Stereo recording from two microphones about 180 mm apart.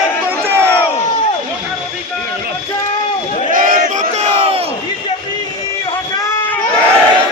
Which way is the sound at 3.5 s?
45° right (ahead or behind).